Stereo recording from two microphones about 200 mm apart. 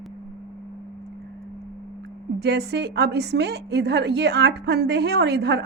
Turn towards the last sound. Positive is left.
turn(degrees=-55)  # may be behind; listen again after turning